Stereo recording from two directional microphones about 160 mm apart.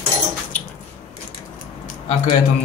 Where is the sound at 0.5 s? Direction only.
10° left (ahead or behind).